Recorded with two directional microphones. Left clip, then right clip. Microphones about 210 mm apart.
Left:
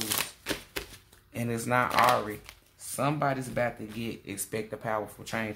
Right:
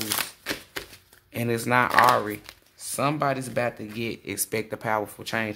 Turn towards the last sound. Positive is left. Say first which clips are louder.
# right 5 dB
turn(degrees=-35)  # may be behind; listen again after turning